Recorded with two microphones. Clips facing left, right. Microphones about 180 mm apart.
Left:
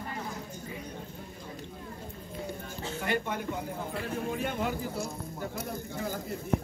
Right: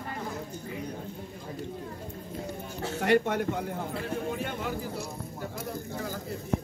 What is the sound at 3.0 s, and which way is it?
Speech, 70° right (ahead or behind).